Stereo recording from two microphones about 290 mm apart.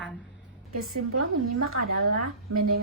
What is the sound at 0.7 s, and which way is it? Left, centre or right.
A woman's voice, right.